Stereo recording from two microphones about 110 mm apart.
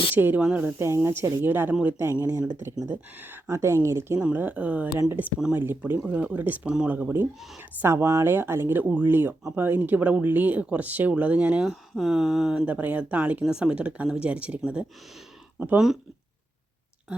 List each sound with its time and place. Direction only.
0.2 s speech: 15° right (ahead or behind)
4.2 s speech: 15° right (ahead or behind)
5.4 s speech: 10° right (ahead or behind)